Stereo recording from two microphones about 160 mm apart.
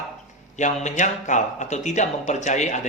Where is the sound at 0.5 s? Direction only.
45° left (ahead or behind).